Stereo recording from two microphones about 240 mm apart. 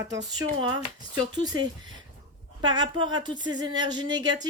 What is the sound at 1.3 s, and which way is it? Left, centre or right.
Speech, centre.